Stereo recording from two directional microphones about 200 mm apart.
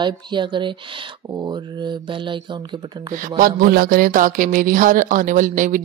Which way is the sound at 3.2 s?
45° right (ahead or behind).